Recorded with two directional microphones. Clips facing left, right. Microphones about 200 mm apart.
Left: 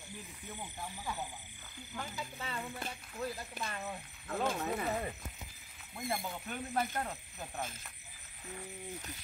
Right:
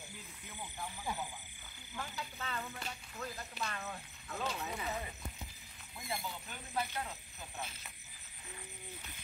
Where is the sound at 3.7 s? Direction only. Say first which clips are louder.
Left 2 dB; 15° left (ahead or behind).